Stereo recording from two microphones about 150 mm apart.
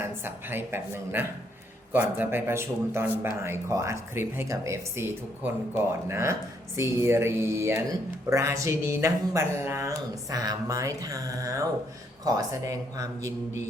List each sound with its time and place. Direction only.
0.0 s a man's voice: 15° right (ahead or behind)